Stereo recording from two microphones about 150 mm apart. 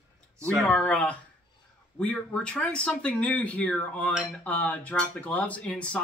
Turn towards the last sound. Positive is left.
turn(degrees=10)  # may be behind; listen again after turning